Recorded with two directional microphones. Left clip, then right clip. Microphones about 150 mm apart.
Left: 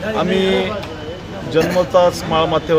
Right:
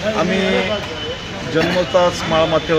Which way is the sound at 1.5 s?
50° left (ahead or behind).